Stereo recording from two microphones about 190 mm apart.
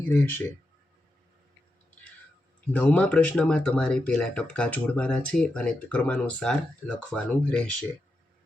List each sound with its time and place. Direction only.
0.1 s speech: 10° left (ahead or behind)
2.7 s speech: 10° left (ahead or behind)